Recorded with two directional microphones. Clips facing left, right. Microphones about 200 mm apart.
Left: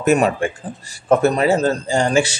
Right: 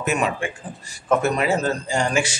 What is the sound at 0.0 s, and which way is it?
Speech, 40° left (ahead or behind).